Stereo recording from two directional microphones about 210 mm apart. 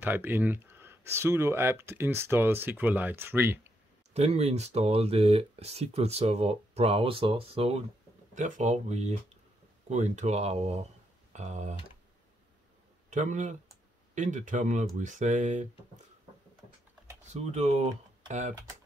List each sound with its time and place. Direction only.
0.0 s speech: 10° right (ahead or behind)
4.1 s speech: 30° right (ahead or behind)
13.1 s speech: 35° right (ahead or behind)
17.2 s speech: 30° right (ahead or behind)